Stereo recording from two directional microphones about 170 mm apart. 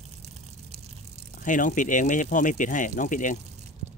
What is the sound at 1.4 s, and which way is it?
Speech, 50° left (ahead or behind).